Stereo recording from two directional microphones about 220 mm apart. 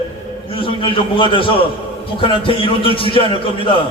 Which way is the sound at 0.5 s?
25° left (ahead or behind).